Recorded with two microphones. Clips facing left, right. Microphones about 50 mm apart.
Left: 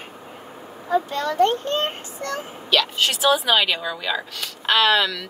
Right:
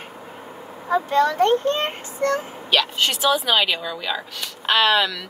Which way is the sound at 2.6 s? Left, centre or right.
Centre.